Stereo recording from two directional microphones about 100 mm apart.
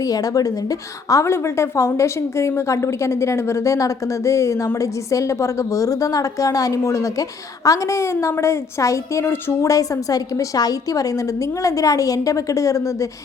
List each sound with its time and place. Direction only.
0.0 s a woman's voice: 35° left (ahead or behind)